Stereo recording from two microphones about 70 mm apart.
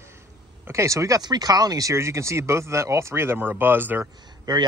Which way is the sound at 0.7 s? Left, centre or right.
Right.